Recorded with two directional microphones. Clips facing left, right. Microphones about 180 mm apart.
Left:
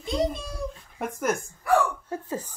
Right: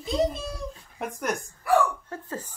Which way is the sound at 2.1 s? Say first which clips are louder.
Left 4 dB; 10° left (ahead or behind).